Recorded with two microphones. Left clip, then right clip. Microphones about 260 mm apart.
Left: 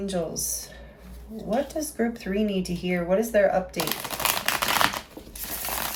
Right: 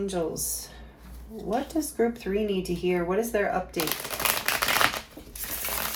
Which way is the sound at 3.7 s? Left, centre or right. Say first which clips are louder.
Left 1 dB; centre.